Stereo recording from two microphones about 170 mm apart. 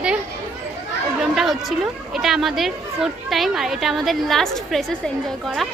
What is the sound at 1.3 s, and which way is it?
A woman's voice, centre (ahead or behind).